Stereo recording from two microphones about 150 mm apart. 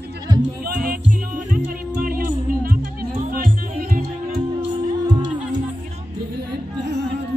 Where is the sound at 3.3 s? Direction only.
75° right (ahead or behind).